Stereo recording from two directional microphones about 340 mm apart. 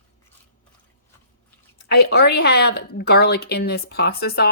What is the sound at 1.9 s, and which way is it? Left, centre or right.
Speech, left.